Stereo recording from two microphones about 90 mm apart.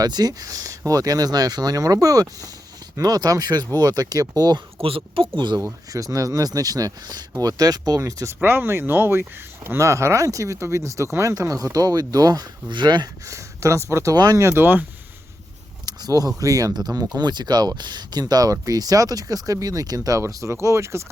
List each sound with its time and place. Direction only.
0.0 s speech: 50° right (ahead or behind)
4.8 s speech: 90° right; by 5.5 s 65° right (ahead or behind)
5.9 s speech: 40° right (ahead or behind)
8.4 s speech: 25° right (ahead or behind); by 13.1 s 55° right (ahead or behind)
13.2 s speech: 35° right (ahead or behind)
14.4 s speech: 25° right (ahead or behind)
15.9 s a sound: 45° right (ahead or behind)
16.4 s speech: 40° right (ahead or behind)